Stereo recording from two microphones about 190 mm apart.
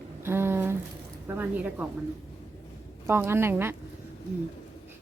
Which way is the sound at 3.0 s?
15° right (ahead or behind).